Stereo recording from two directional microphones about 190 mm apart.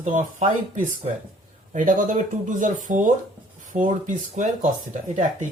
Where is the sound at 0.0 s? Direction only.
40° right (ahead or behind).